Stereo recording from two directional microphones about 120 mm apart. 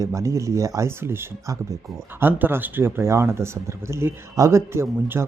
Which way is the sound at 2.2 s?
15° right (ahead or behind).